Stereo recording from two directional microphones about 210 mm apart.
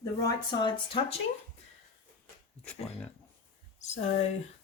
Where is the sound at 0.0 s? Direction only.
20° left (ahead or behind).